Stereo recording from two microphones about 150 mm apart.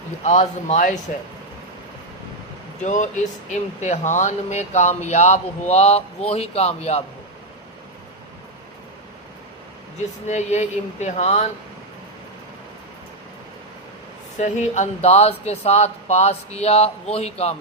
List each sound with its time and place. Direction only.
0.2 s speech: 50° left (ahead or behind)
2.8 s speech: 55° left (ahead or behind)
10.2 s speech: 50° left (ahead or behind)
14.3 s speech: 55° left (ahead or behind)